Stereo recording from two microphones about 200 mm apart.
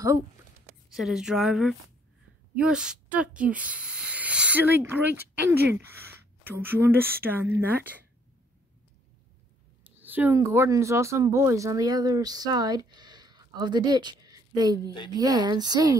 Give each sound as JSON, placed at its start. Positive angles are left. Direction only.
{"t": 0.9, "sound": "speech", "side_deg": 0}
{"t": 5.4, "sound": "speech", "side_deg": -55}
{"t": 6.4, "sound": "speech", "side_deg": -10}
{"t": 9.9, "sound": "speech", "side_deg": -10}